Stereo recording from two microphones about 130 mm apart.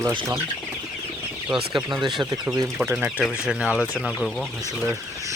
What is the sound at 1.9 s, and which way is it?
Speech, 35° right (ahead or behind).